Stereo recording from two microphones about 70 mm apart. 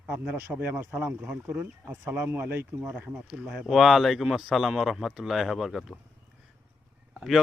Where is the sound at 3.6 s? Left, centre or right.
Centre.